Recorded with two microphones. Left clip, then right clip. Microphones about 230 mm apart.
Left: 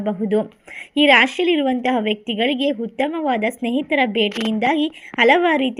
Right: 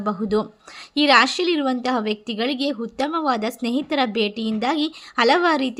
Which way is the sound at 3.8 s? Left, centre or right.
Centre.